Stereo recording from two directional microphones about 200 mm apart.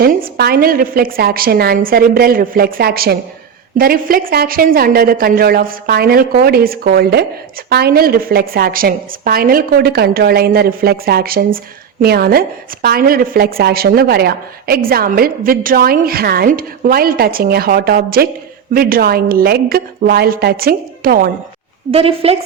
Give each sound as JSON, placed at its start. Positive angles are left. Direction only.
{"t": 0.0, "sound": "a woman's voice", "side_deg": -50}
{"t": 21.9, "sound": "a woman's voice", "side_deg": -30}